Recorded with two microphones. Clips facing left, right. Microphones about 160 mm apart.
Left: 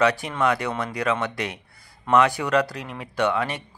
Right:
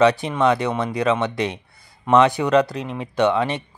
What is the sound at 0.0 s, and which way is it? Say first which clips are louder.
Speech: right 5 dB; 25° right (ahead or behind).